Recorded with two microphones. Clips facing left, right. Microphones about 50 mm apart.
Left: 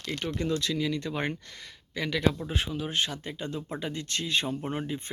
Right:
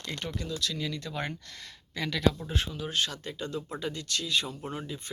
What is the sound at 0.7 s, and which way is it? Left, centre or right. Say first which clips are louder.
Speech: left 5 dB; centre.